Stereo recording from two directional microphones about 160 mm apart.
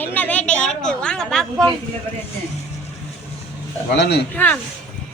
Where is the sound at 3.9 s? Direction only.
90° left.